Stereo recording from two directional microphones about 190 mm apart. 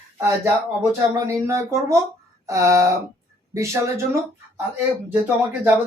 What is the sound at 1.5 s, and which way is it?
Speech, 15° right (ahead or behind).